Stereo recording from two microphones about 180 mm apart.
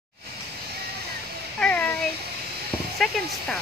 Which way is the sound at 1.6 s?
10° left (ahead or behind).